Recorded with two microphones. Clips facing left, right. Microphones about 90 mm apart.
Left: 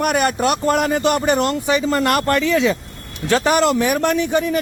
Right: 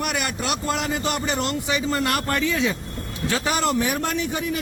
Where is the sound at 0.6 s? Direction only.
60° left (ahead or behind); by 2.7 s 90° left.